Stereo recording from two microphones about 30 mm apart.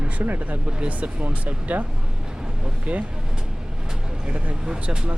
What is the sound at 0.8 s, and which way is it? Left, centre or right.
Speech, right.